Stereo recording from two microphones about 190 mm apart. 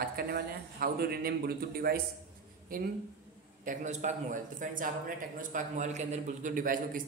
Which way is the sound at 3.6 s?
40° right (ahead or behind).